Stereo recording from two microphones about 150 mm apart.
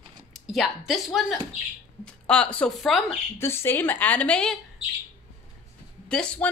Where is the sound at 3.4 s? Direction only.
15° left (ahead or behind).